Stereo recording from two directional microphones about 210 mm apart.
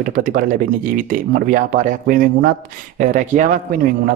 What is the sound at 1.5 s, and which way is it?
Speech, 40° right (ahead or behind).